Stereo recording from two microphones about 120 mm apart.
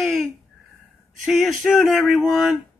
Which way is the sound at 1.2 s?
Centre (ahead or behind).